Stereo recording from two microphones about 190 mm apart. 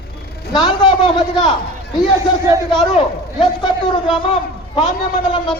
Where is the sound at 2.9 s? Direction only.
30° left (ahead or behind).